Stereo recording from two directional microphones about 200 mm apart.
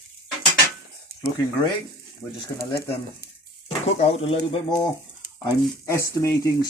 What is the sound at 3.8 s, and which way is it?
Speech, 30° left (ahead or behind).